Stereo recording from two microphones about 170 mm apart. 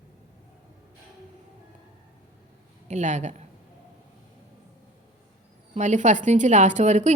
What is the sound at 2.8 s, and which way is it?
Speech, 45° right (ahead or behind).